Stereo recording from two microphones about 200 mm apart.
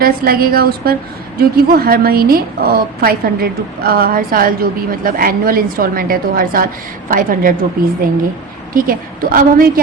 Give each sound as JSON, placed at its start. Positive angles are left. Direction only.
{"t": 0.0, "sound": "a woman's voice", "side_deg": -50}
{"t": 8.7, "sound": "a woman's voice", "side_deg": -45}